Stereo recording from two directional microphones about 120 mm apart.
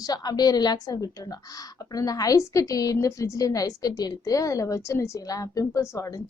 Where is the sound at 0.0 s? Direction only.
35° left (ahead or behind).